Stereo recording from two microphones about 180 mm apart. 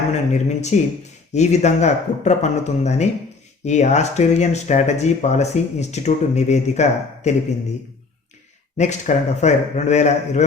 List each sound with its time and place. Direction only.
0.1 s speech: 40° left (ahead or behind)
8.8 s speech: 40° left (ahead or behind)